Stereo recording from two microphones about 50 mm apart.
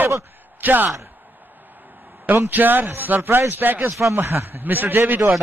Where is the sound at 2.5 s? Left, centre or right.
Right.